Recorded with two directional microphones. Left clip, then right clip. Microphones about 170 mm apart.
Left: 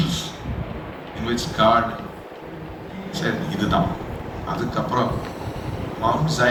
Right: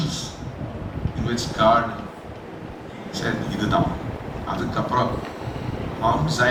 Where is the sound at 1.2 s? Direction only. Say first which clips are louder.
Left 1 dB; 20° left (ahead or behind).